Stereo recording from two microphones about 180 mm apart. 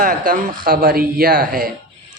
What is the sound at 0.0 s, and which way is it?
A man's voice, 50° right (ahead or behind).